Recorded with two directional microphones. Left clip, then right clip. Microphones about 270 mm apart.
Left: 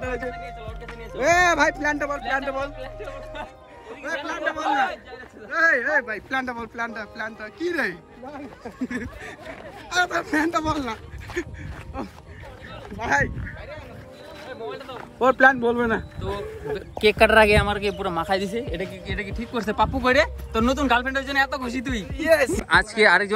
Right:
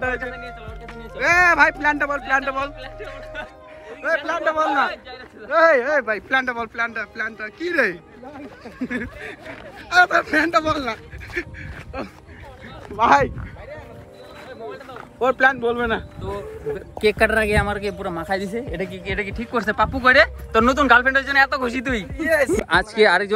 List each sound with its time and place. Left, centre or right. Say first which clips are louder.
0.0 s speech: right 4 dB; centre
2.8 s a sound: right 1 dB; left
4.0 s speech: right 6 dB; centre
15.5 s a man's voice: right 1 dB; centre
16.2 s speech: even; centre